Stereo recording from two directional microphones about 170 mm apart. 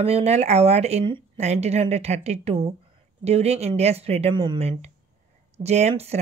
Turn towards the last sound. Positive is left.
turn(degrees=-40)  # may be behind; listen again after turning